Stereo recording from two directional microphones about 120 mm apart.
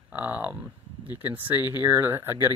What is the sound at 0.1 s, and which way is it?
Speech, 15° right (ahead or behind).